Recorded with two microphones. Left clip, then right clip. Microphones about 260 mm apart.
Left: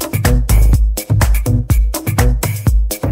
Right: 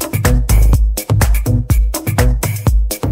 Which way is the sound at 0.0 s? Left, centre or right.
Centre.